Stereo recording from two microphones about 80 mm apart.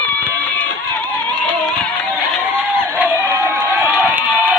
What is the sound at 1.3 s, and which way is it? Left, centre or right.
Music, centre.